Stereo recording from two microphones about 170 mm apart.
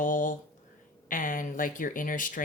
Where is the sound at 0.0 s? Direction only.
50° left (ahead or behind).